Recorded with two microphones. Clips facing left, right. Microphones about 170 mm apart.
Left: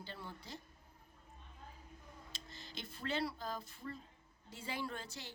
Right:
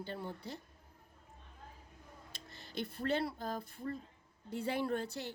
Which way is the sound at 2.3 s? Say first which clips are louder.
Right 8 dB; 60° right (ahead or behind).